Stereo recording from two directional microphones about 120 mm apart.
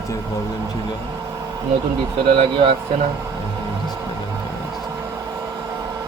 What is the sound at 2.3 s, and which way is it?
Speech, 45° right (ahead or behind).